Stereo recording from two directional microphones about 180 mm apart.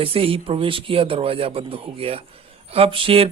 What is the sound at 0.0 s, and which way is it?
Speech, 30° right (ahead or behind).